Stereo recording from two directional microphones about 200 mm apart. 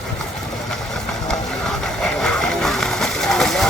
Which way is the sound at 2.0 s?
Centre (ahead or behind).